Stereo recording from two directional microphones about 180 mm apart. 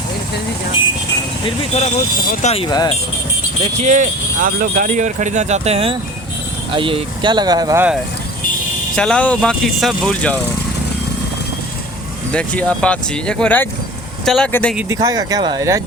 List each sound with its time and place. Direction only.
1.5 s speech: 35° left (ahead or behind)
2.2 s speech: 50° left (ahead or behind)
2.6 s speech: 20° left (ahead or behind)
3.6 s speech: 40° right (ahead or behind); by 7.9 s 20° right (ahead or behind)
9.0 s speech: 5° left (ahead or behind)
12.3 s speech: 5° left (ahead or behind)
14.8 s speech: 20° right (ahead or behind)